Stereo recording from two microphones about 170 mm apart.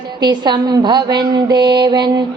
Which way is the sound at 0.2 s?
25° right (ahead or behind).